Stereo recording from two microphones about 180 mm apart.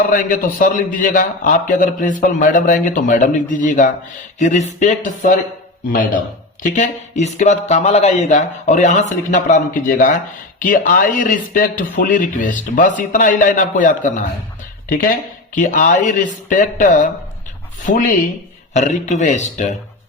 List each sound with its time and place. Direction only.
0.1 s a man's voice: 50° left (ahead or behind)
6.6 s a man's voice: 45° left (ahead or behind)
15.5 s a man's voice: 45° left (ahead or behind)